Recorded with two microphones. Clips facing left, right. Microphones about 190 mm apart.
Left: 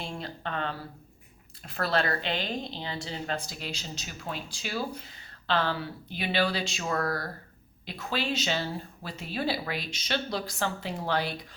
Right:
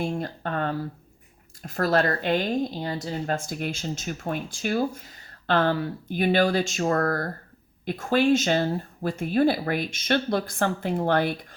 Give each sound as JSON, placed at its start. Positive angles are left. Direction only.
{"t": 0.0, "sound": "a woman's voice", "side_deg": -50}